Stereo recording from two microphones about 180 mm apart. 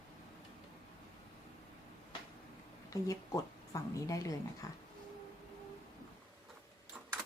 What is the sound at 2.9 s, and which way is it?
Speech, 20° left (ahead or behind).